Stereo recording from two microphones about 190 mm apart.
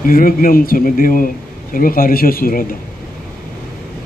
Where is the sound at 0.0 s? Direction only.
50° left (ahead or behind).